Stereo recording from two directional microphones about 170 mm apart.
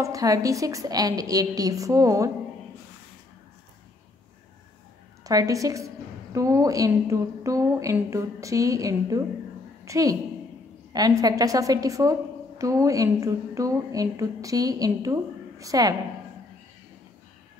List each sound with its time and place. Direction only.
0.0 s a woman's voice: 20° right (ahead or behind)
5.2 s a woman's voice: 20° right (ahead or behind)